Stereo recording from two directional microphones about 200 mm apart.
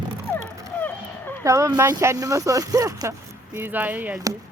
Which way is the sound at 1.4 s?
15° right (ahead or behind).